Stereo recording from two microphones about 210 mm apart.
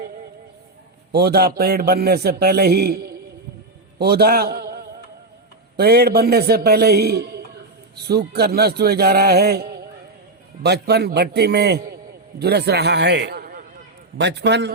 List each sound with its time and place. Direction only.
1.1 s a man's voice: 50° right (ahead or behind)